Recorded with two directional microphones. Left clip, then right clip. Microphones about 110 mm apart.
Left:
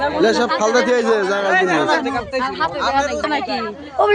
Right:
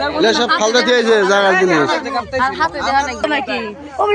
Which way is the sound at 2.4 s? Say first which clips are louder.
Right 4 dB; 65° right (ahead or behind).